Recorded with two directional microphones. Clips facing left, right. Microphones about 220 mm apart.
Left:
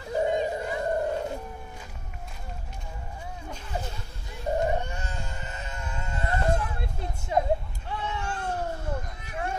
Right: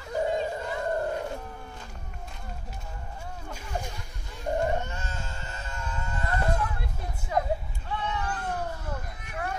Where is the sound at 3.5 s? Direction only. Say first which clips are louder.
Even; 10° right (ahead or behind).